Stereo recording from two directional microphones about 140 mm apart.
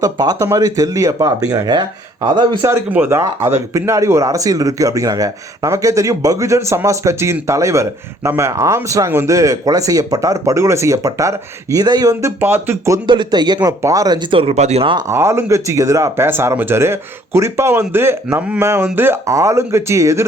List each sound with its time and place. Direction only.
0.0 s speech: 25° right (ahead or behind)
2.6 s speech: 20° right (ahead or behind)
12.4 s speech: 15° right (ahead or behind)
13.1 s speech: 30° right (ahead or behind); by 14.8 s 50° right (ahead or behind)
15.1 s speech: 20° right (ahead or behind)